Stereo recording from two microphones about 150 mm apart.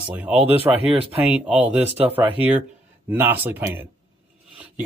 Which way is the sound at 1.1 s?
5° right (ahead or behind).